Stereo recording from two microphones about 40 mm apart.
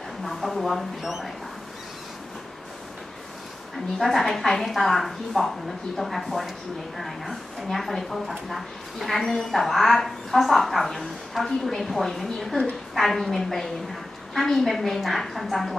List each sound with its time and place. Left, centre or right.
0.2 s speech: centre
4.0 s a woman's voice: centre